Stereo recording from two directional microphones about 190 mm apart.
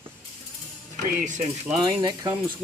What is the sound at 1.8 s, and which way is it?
Speech, 20° right (ahead or behind).